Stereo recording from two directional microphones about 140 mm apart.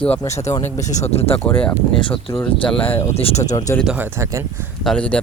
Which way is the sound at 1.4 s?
15° left (ahead or behind).